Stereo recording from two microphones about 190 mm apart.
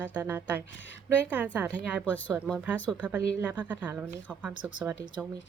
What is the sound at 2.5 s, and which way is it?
A woman's voice, 10° right (ahead or behind).